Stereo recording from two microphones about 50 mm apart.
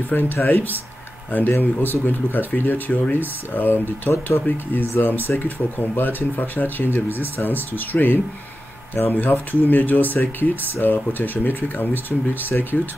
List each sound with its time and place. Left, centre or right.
0.1 s speech: left
12.7 s speech: left